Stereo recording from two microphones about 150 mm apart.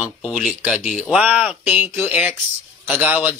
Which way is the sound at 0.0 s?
5° right (ahead or behind).